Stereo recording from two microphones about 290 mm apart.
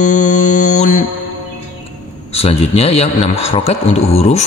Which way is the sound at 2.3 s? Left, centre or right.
Left.